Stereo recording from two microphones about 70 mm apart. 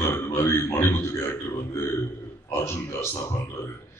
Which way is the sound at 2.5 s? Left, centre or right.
Left.